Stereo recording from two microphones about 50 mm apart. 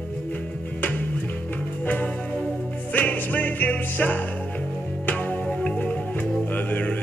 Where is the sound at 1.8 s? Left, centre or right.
Left.